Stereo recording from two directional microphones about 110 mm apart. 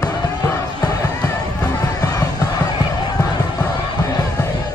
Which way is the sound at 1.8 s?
35° left (ahead or behind).